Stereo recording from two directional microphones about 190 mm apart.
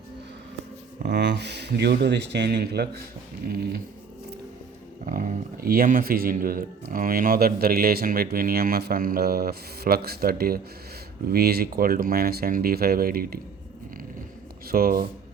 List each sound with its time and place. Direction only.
1.0 s speech: 60° right (ahead or behind)
5.0 s speech: 45° right (ahead or behind)
14.7 s speech: 50° right (ahead or behind)